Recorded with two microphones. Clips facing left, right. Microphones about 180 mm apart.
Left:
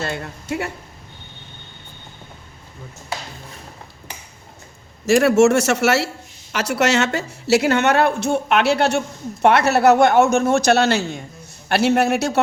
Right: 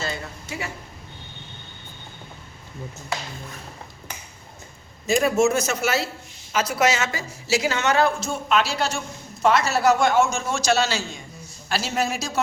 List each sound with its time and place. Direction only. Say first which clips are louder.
0.0 s speech: left 4 dB; 60° left (ahead or behind)
5.0 s a man's voice: left 6 dB; 80° left; by 12.4 s 60° left (ahead or behind)